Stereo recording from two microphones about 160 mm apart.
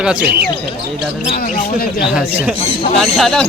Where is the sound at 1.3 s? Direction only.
70° left (ahead or behind).